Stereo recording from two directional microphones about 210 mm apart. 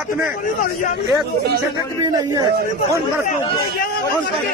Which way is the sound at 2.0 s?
15° right (ahead or behind).